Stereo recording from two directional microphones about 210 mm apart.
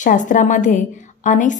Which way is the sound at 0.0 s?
35° left (ahead or behind).